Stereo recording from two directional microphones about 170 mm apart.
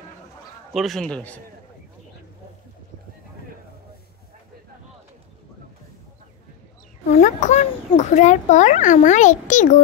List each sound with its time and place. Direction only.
0.7 s speech: centre (ahead or behind)
7.1 s a child's voice: 45° left (ahead or behind)